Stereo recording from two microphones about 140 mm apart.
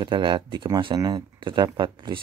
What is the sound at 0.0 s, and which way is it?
Speech, 35° right (ahead or behind).